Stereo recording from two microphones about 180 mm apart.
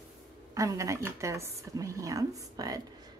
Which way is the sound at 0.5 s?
20° right (ahead or behind).